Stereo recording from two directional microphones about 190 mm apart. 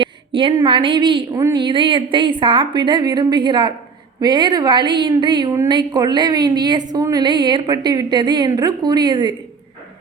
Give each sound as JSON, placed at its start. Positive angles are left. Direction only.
{"t": 0.0, "sound": "a woman's voice", "side_deg": -25}